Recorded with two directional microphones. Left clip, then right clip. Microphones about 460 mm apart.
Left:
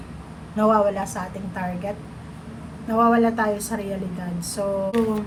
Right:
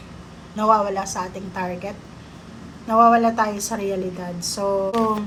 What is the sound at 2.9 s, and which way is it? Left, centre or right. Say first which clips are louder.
Speech: right 4 dB; centre.